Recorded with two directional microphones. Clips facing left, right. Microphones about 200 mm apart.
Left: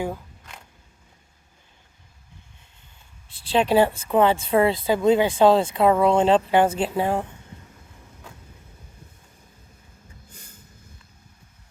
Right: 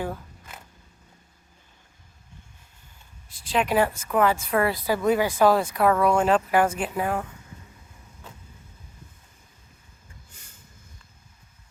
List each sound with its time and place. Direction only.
3.5 s speech: 30° left (ahead or behind)
10.3 s vehicle: 35° left (ahead or behind)